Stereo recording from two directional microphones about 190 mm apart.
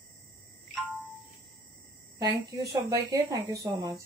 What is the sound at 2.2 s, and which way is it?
A woman's voice, 15° right (ahead or behind).